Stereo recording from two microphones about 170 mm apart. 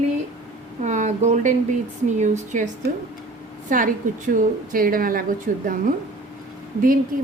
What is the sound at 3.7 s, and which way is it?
A woman's voice, 50° right (ahead or behind).